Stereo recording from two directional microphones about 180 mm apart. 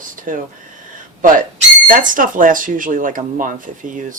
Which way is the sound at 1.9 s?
50° right (ahead or behind).